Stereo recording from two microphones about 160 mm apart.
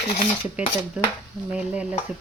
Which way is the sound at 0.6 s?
5° right (ahead or behind).